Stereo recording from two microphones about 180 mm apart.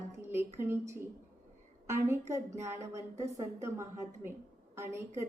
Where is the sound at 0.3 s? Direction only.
15° right (ahead or behind).